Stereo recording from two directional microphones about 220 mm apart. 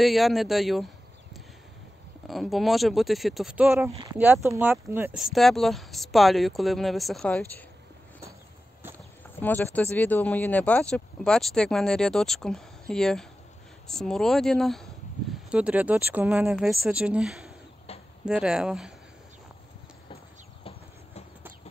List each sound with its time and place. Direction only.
0.0 s speech: centre (ahead or behind)
2.2 s speech: centre (ahead or behind)
9.4 s speech: 10° left (ahead or behind)
17.9 s a sound: 25° left (ahead or behind)
18.2 s speech: 5° right (ahead or behind)